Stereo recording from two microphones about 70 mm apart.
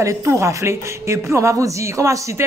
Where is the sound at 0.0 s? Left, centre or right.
Right.